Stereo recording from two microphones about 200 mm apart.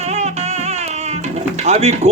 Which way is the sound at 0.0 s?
35° right (ahead or behind).